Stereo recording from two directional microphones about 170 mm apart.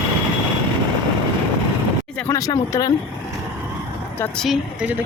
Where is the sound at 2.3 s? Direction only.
20° left (ahead or behind).